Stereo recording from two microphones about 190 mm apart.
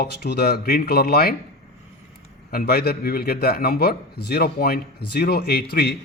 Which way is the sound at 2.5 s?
55° left (ahead or behind).